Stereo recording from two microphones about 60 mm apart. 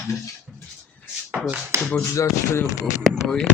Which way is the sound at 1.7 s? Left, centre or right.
Right.